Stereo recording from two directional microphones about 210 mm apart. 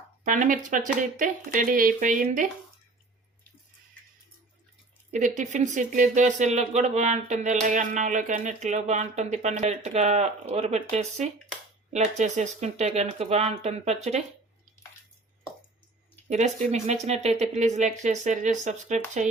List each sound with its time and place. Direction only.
0.3 s speech: 40° right (ahead or behind)
5.1 s speech: 35° right (ahead or behind)
16.3 s speech: 35° right (ahead or behind)